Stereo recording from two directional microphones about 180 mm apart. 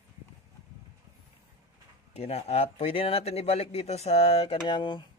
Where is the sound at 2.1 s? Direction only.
35° left (ahead or behind).